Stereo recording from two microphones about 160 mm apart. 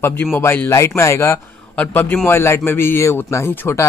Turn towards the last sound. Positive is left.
turn(degrees=15)  # may be behind; listen again after turning